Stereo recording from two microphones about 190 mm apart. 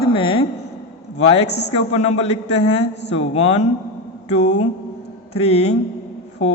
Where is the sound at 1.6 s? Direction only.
35° left (ahead or behind).